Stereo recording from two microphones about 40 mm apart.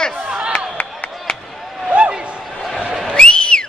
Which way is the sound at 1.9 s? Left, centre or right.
Right.